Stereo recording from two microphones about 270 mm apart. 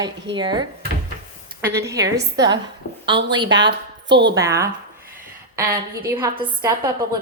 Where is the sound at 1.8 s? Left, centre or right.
Centre.